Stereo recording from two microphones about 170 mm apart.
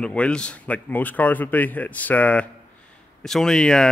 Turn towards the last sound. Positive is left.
turn(degrees=5)  # may be behind; listen again after turning